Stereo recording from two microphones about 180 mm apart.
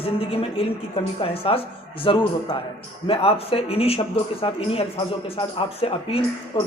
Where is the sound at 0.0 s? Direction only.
30° left (ahead or behind).